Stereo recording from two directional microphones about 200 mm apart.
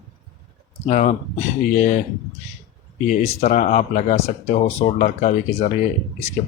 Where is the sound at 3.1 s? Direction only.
35° left (ahead or behind).